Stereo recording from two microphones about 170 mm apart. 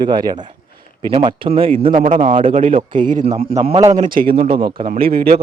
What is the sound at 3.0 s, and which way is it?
Speech, 50° right (ahead or behind).